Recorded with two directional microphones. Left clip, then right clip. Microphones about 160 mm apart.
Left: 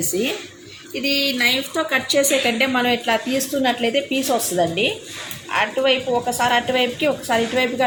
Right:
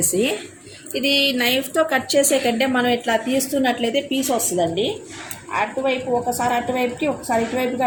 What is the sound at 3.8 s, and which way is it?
Speech, 10° right (ahead or behind).